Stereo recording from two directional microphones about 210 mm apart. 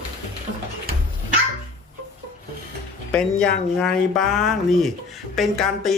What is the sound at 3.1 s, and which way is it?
Speech, 5° left (ahead or behind).